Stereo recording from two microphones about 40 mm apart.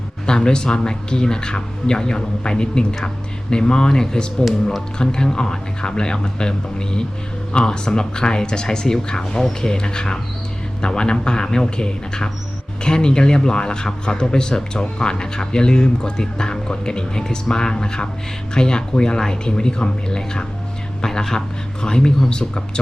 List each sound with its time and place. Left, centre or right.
0.3 s speech: centre